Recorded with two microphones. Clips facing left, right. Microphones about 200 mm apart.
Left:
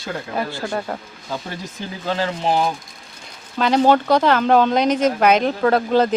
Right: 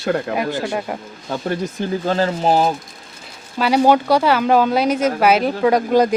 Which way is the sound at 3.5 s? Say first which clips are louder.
Right 1 dB; 10° right (ahead or behind).